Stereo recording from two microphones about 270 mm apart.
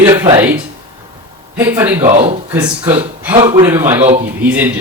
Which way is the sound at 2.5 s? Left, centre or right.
Centre.